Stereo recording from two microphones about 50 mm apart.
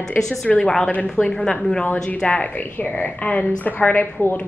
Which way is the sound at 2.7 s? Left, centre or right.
Left.